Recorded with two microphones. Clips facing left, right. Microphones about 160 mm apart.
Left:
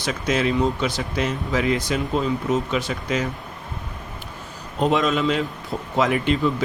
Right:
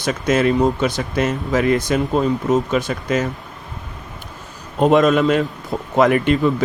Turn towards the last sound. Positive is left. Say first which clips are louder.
# right 6 dB
turn(degrees=-55)  # may be behind; listen again after turning